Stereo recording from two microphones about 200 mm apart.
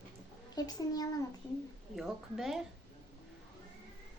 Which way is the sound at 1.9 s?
Centre (ahead or behind).